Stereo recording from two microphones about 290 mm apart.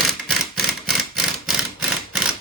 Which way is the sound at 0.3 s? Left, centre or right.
Centre.